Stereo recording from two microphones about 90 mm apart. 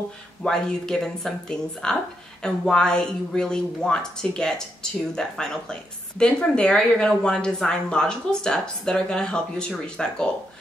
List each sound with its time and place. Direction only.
0.4 s a woman's voice: 5° left (ahead or behind)